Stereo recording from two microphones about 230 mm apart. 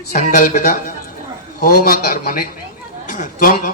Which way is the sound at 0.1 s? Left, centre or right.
Left.